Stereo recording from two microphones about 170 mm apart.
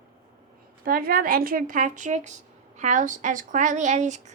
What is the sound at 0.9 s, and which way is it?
A woman's voice, 55° right (ahead or behind).